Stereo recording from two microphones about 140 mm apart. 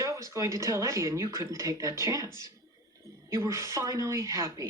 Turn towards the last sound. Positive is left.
turn(degrees=-20)  # may be behind; listen again after turning